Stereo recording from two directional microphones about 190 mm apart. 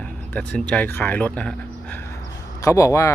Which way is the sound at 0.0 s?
10° left (ahead or behind).